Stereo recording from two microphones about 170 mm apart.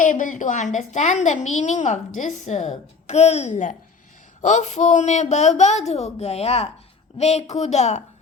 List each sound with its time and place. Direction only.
0.0 s a woman's voice: 50° left (ahead or behind)